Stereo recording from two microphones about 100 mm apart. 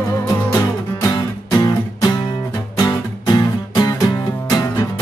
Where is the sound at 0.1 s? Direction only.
40° left (ahead or behind).